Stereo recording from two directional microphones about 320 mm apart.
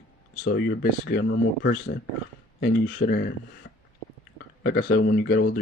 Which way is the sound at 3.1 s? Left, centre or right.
Left.